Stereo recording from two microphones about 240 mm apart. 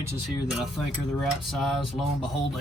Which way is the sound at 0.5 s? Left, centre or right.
Centre.